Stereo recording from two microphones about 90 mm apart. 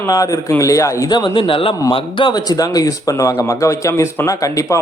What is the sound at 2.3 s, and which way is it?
Speech, 45° left (ahead or behind).